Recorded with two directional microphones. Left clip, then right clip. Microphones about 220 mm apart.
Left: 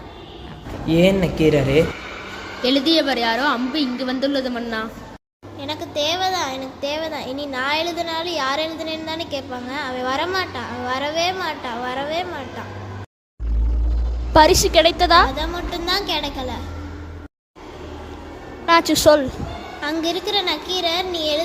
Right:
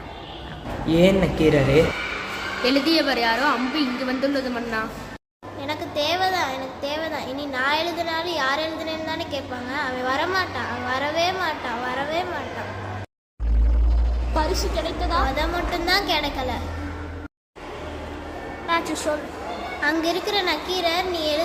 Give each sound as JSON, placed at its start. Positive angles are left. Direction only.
{"t": 0.9, "sound": "a child's voice", "side_deg": 15}
{"t": 3.0, "sound": "a woman's voice", "side_deg": 25}
{"t": 14.3, "sound": "a woman's voice", "side_deg": 45}
{"t": 15.4, "sound": "a child's voice", "side_deg": 10}
{"t": 18.6, "sound": "a woman's voice", "side_deg": 35}
{"t": 19.8, "sound": "a child's voice", "side_deg": 15}